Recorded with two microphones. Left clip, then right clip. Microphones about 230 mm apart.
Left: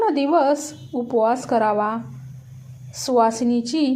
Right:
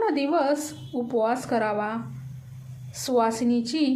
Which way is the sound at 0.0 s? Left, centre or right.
Centre.